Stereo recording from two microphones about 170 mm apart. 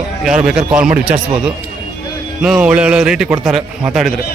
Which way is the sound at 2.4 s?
5° right (ahead or behind).